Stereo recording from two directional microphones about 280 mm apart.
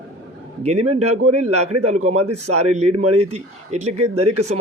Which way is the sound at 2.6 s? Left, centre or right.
Right.